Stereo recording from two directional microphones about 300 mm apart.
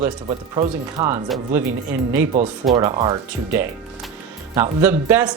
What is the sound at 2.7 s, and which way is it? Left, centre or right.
Speech, centre.